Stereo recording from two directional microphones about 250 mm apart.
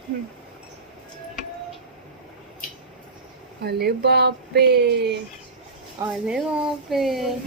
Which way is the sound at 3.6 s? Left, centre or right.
Right.